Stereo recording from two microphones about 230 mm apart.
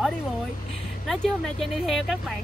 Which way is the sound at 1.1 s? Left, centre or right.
Centre.